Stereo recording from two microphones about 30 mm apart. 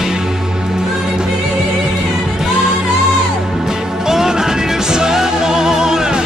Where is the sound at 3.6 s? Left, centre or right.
Centre.